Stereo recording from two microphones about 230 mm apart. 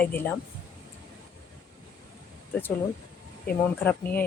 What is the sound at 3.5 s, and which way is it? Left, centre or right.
Speech, centre.